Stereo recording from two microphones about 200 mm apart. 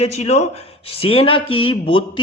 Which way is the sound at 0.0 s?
35° left (ahead or behind).